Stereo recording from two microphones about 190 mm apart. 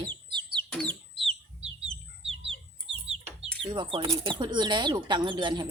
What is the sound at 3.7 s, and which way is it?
Speech, 25° right (ahead or behind).